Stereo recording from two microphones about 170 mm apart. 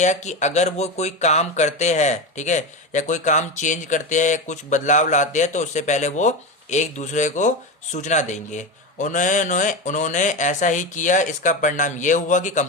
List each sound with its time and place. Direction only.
0.0 s speech: 45° left (ahead or behind)